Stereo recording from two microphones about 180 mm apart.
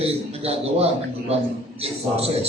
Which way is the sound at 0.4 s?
35° right (ahead or behind).